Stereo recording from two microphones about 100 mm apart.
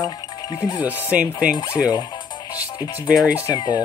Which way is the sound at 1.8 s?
45° left (ahead or behind).